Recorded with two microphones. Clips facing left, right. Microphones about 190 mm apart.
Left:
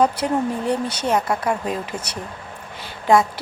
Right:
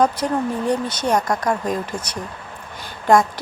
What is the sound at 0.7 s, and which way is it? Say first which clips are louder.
Speech: right 2 dB; 10° left (ahead or behind).